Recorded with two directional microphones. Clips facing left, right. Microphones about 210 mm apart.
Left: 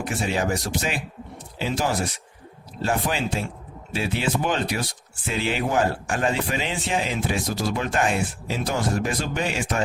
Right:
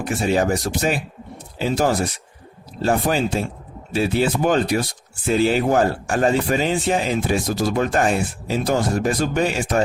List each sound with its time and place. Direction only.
0.0 s a man's voice: 40° right (ahead or behind)